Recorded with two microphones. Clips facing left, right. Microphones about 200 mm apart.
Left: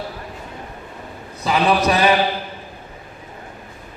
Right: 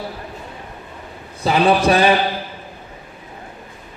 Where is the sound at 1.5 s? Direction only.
30° right (ahead or behind).